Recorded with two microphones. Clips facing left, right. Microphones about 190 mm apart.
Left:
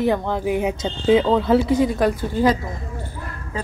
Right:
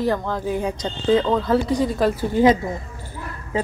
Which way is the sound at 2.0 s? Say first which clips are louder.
Right 1 dB; 5° right (ahead or behind).